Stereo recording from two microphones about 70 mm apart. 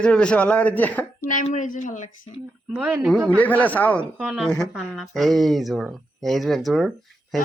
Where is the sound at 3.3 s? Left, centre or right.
Left.